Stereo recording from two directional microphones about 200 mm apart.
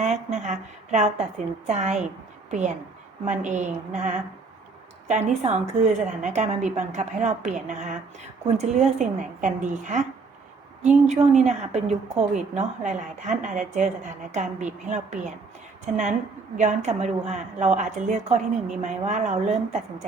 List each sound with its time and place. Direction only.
0.0 s a woman's voice: 35° right (ahead or behind)
16.6 s speech: 35° right (ahead or behind)